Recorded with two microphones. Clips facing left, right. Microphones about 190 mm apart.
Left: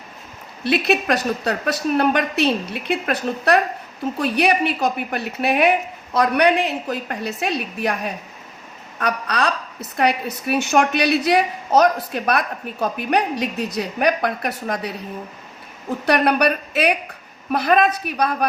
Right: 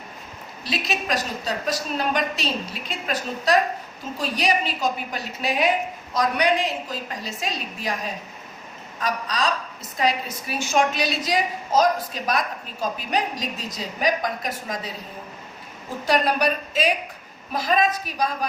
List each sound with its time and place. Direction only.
0.6 s a woman's voice: 60° left (ahead or behind)
16.0 s a woman's voice: 60° left (ahead or behind)